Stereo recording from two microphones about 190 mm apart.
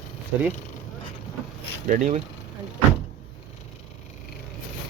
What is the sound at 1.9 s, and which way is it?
Speech, 40° right (ahead or behind).